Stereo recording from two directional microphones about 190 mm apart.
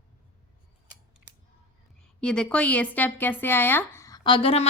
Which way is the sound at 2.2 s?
5° left (ahead or behind).